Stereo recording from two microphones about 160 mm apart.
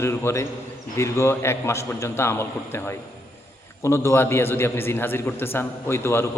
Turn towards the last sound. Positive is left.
turn(degrees=15)  # may be behind; listen again after turning